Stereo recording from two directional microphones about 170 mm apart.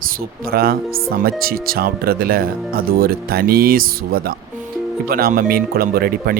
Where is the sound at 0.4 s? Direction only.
60° right (ahead or behind).